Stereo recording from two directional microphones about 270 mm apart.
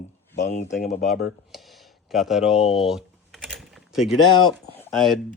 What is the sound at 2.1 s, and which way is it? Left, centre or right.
Speech, centre.